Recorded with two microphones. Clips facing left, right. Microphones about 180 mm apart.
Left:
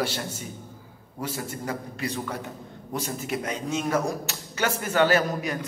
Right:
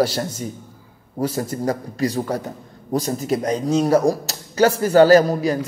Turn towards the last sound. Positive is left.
turn(degrees=-35)  # may be behind; listen again after turning